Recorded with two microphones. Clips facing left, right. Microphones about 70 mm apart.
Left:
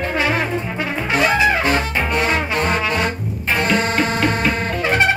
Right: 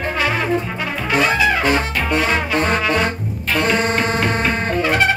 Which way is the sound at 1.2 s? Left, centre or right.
Left.